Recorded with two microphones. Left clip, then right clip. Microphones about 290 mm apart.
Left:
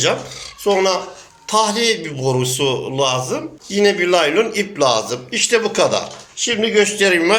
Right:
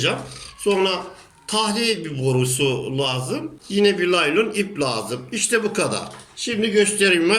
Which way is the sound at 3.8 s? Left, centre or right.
Centre.